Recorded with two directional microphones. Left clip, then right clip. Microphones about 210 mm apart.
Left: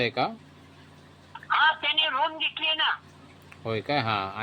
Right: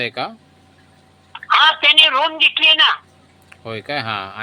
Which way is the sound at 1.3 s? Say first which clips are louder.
Right 9 dB; 35° right (ahead or behind).